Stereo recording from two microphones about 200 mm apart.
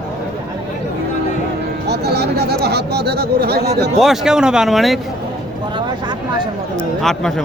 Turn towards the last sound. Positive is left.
turn(degrees=5)  # may be behind; listen again after turning